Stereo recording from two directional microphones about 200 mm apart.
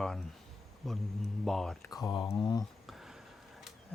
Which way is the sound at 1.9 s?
20° left (ahead or behind).